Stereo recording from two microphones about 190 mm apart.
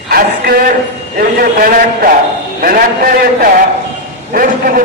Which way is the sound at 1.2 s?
50° right (ahead or behind).